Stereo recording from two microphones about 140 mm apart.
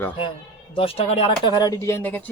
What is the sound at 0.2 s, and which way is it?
Speech, 40° left (ahead or behind).